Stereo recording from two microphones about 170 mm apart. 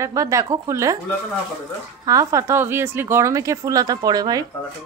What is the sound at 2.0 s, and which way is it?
Speech, 20° right (ahead or behind).